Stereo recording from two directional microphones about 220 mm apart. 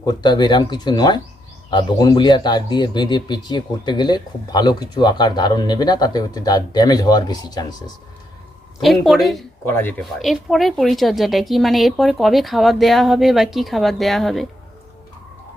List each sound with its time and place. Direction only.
0.0 s a man's voice: 20° left (ahead or behind)
8.8 s speech: centre (ahead or behind)
9.6 s speech: 10° left (ahead or behind)
10.0 s speech: centre (ahead or behind)